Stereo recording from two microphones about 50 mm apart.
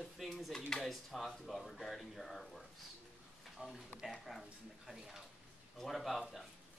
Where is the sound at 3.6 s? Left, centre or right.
Right.